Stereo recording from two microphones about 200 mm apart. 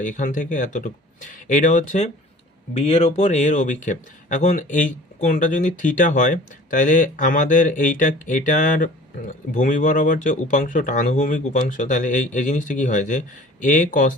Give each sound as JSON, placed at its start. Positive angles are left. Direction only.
{"t": 0.0, "sound": "speech", "side_deg": 40}